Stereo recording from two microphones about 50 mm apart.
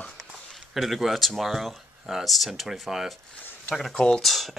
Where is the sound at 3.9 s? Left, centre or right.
Centre.